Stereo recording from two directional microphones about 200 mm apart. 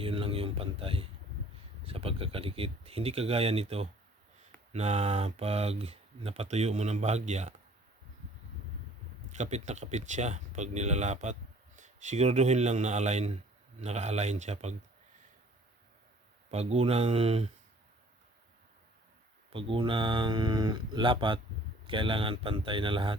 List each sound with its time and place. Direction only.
0.0 s a sound: 25° right (ahead or behind)
1.8 s speech: 30° right (ahead or behind)
9.3 s speech: 35° right (ahead or behind)
16.5 s speech: 30° right (ahead or behind)
19.5 s speech: 25° right (ahead or behind)